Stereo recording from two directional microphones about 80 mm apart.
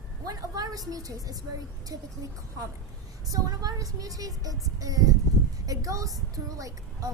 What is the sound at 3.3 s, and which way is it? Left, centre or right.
Child singing, right.